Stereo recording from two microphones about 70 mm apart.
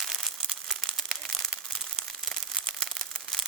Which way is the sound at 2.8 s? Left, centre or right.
Centre.